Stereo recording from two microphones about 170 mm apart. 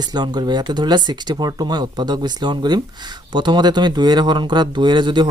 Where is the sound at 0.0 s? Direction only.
25° right (ahead or behind).